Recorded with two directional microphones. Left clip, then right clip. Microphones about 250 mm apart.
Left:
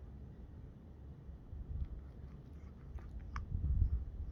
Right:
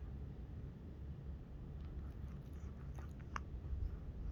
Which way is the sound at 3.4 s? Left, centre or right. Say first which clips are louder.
Right 2 dB; centre.